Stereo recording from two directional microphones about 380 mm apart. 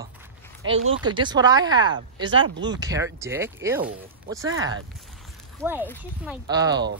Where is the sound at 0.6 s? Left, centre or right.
Right.